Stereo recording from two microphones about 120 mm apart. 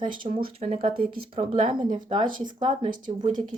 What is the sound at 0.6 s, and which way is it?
Speech, 60° right (ahead or behind).